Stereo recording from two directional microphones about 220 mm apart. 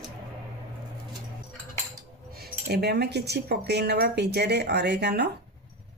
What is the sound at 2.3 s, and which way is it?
Speech, 45° right (ahead or behind).